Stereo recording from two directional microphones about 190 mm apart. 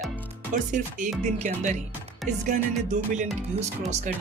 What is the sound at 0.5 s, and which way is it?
Music, 40° right (ahead or behind).